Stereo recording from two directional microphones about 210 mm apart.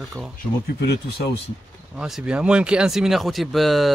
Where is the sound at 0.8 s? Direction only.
50° left (ahead or behind).